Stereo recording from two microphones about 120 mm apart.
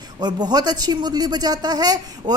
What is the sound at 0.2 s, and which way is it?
A woman's voice, 35° right (ahead or behind).